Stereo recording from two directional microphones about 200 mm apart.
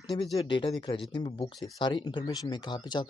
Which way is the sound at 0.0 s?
20° left (ahead or behind).